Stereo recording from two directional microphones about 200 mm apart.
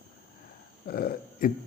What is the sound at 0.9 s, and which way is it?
Speech, 50° left (ahead or behind).